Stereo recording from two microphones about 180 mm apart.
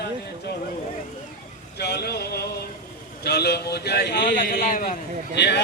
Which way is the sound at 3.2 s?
65° left (ahead or behind).